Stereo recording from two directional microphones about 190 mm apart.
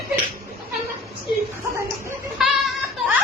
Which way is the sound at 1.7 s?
15° right (ahead or behind).